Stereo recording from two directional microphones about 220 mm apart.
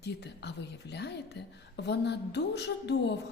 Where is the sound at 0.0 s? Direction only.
50° left (ahead or behind).